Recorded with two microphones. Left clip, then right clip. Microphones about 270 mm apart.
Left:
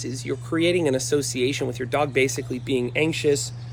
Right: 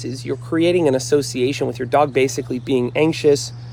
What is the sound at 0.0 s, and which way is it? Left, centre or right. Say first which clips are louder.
Speech: right 4 dB; centre.